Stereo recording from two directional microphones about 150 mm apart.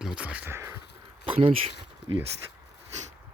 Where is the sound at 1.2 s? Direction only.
35° right (ahead or behind).